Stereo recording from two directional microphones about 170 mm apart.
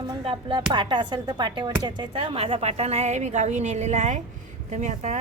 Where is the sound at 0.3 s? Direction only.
30° right (ahead or behind).